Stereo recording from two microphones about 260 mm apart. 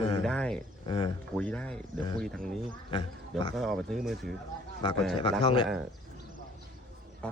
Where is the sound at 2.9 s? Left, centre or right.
Centre.